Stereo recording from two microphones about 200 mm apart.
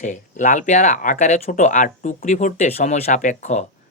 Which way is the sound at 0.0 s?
40° left (ahead or behind).